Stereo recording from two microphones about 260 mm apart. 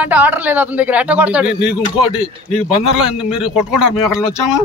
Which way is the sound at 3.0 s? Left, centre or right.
Centre.